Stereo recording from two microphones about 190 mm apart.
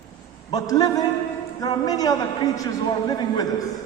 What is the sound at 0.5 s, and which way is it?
A man's voice, 20° left (ahead or behind).